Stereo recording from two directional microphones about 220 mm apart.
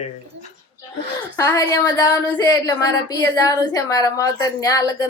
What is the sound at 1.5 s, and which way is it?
Speech, 15° left (ahead or behind).